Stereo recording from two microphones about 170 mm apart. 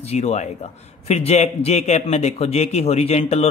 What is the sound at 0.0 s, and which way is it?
Speech, 40° left (ahead or behind).